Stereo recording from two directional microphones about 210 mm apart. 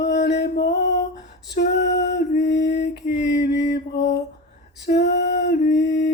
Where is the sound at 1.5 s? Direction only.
55° left (ahead or behind).